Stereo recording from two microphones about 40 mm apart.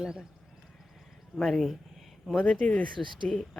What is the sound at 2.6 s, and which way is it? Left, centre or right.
Speech, left.